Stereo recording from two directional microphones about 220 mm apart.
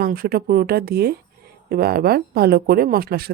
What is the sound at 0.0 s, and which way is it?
Speech, 45° right (ahead or behind).